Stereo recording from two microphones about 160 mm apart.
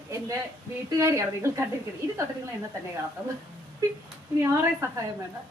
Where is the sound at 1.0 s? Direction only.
15° right (ahead or behind).